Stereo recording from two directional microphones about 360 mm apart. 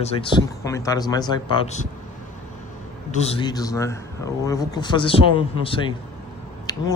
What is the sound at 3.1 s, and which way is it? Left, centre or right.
A man's voice, centre.